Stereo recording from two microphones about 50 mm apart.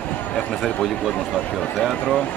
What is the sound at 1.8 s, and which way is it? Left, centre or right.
Speech, centre.